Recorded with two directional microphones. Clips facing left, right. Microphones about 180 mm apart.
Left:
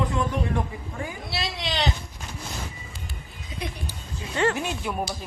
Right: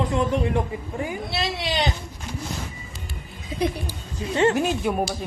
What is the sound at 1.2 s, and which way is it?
Speech, centre (ahead or behind).